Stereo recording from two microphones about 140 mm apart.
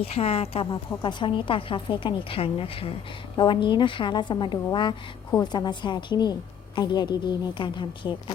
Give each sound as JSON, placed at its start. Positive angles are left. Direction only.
{"t": 0.0, "sound": "a woman's voice", "side_deg": 45}